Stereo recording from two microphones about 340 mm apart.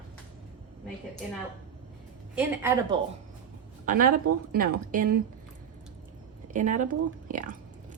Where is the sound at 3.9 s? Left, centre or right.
Right.